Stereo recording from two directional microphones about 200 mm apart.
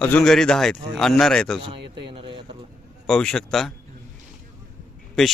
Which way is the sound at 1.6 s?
25° right (ahead or behind).